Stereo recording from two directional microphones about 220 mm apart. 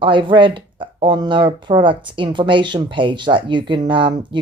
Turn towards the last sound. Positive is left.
turn(degrees=-20)  # may be behind; listen again after turning